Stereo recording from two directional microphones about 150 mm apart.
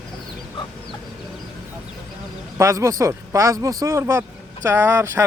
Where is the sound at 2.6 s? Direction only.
20° right (ahead or behind).